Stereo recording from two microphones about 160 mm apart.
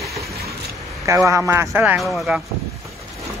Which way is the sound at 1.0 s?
20° right (ahead or behind).